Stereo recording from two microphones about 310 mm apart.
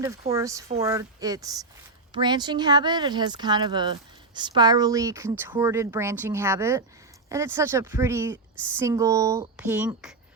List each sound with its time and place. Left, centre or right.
0.0 s speech: centre